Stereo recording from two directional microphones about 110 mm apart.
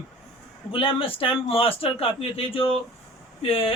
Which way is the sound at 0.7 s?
55° left (ahead or behind).